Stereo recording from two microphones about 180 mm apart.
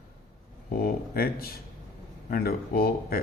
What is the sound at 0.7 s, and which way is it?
Speech, 55° left (ahead or behind).